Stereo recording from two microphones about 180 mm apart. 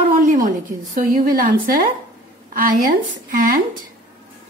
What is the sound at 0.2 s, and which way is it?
A woman's voice, 45° right (ahead or behind).